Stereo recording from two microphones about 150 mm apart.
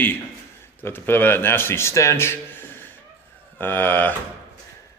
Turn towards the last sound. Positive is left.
turn(degrees=15)  # may be behind; listen again after turning